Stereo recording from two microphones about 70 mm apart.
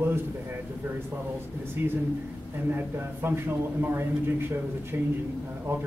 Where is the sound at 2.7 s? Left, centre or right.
Right.